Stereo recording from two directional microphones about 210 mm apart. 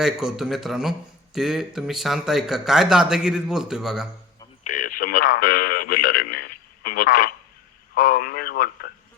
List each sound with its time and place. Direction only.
0.0 s speech: centre (ahead or behind)
4.6 s radio: 40° left (ahead or behind)
7.9 s speech: 40° left (ahead or behind)